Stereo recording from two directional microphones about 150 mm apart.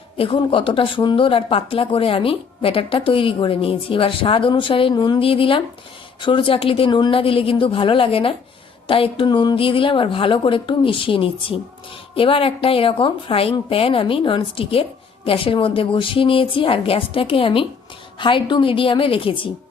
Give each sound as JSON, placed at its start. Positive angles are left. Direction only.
{"t": 0.2, "sound": "a woman's voice", "side_deg": 35}